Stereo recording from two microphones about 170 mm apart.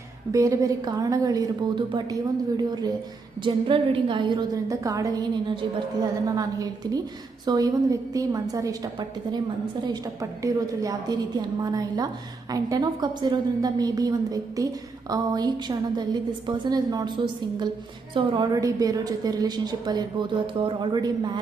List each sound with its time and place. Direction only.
0.3 s a woman's voice: 20° right (ahead or behind)
18.1 s a woman's voice: 25° right (ahead or behind)